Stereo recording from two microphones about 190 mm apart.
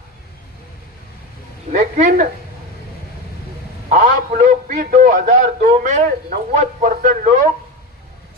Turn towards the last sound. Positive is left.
turn(degrees=-45)  # may be behind; listen again after turning